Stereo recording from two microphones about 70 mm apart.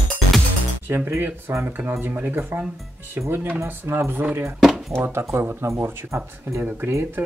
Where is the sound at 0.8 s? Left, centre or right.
Right.